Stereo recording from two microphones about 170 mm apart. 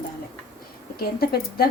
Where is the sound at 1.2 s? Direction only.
65° left (ahead or behind).